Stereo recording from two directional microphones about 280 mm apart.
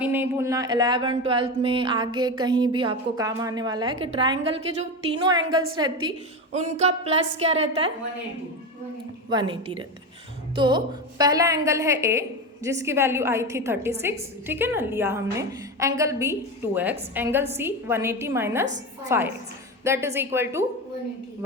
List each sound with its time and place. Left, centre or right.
0.0 s a woman's voice: centre; by 7.9 s right
9.3 s a woman's voice: centre